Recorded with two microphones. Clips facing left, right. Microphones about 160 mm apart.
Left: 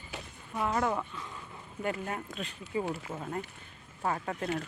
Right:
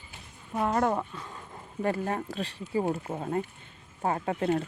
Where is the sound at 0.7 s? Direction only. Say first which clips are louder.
Right 4 dB; 40° right (ahead or behind).